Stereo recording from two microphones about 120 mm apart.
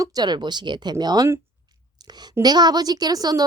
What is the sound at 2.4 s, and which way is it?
A woman's voice, 35° right (ahead or behind).